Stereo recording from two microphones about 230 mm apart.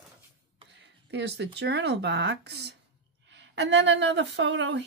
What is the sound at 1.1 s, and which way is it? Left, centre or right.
A woman's voice, right.